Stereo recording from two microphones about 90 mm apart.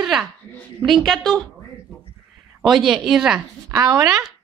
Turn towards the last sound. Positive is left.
turn(degrees=-35)  # may be behind; listen again after turning